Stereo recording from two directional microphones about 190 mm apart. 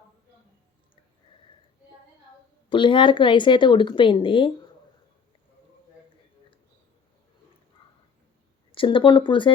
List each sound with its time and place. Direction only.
2.6 s speech: 25° left (ahead or behind)
8.7 s speech: 25° left (ahead or behind)